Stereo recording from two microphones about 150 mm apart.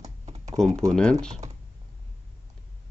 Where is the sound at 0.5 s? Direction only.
5° left (ahead or behind).